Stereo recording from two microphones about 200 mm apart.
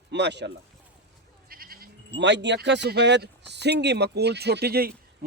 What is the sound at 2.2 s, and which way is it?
Speech, 60° right (ahead or behind).